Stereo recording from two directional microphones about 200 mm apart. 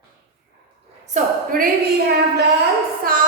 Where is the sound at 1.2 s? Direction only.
40° right (ahead or behind).